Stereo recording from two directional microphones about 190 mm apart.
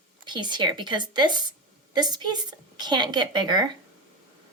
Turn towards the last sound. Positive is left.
turn(degrees=-25)  # may be behind; listen again after turning